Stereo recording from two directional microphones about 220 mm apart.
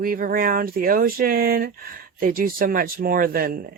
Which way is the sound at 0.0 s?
40° right (ahead or behind).